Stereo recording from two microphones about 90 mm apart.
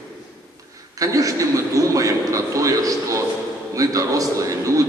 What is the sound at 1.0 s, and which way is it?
A man's voice, 40° right (ahead or behind).